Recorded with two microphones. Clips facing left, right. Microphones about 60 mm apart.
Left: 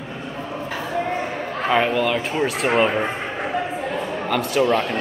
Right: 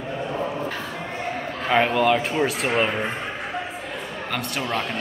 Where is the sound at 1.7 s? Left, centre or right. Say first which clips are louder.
Right 1 dB; centre.